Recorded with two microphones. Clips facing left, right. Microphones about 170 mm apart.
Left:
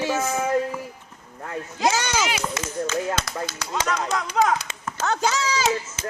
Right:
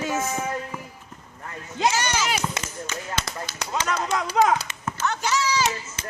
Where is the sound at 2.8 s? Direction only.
90° left.